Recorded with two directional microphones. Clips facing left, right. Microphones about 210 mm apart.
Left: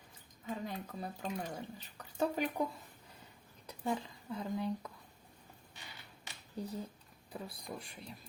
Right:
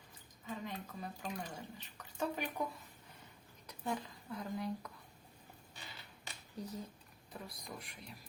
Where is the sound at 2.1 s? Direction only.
35° left (ahead or behind).